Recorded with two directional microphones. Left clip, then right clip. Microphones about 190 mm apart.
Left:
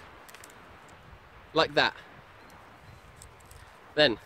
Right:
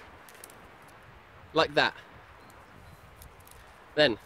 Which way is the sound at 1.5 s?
Centre (ahead or behind).